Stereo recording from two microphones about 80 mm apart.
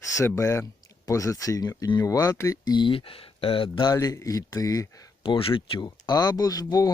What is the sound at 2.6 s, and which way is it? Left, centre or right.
Speech, left.